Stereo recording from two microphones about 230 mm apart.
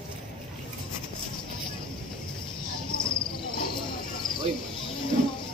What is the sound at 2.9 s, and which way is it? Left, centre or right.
Cricket, left.